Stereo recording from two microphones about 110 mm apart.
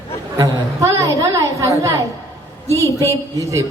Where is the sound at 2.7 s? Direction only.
25° left (ahead or behind).